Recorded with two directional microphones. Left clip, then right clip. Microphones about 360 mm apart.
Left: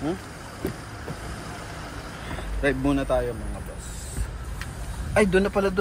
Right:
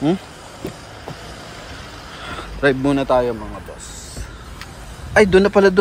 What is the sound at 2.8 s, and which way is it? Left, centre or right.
Speech, centre.